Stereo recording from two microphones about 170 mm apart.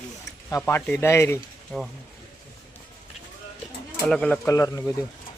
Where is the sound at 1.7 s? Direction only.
5° left (ahead or behind).